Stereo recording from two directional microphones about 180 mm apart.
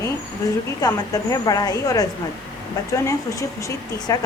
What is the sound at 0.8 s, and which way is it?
A woman's voice, 20° left (ahead or behind).